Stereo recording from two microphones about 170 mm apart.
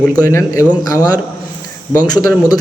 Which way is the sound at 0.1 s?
20° left (ahead or behind).